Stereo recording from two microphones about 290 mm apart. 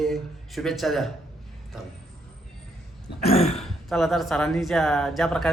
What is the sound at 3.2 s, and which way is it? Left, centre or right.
Throat clearing, left.